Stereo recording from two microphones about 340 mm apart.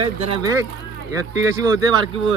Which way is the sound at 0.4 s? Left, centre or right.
Centre.